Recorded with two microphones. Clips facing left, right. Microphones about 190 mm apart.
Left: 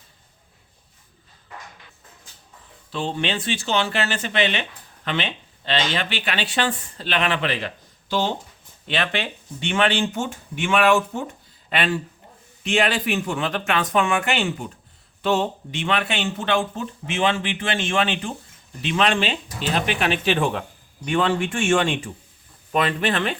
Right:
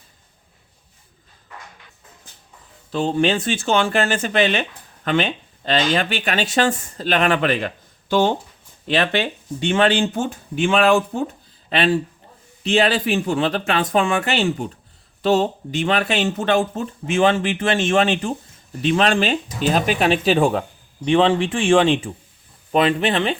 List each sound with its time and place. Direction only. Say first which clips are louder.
2.9 s speech: right 7 dB; 40° right (ahead or behind)
8.9 s speech: right 6 dB; 40° right (ahead or behind)
12.6 s speech: right 4 dB; 35° right (ahead or behind)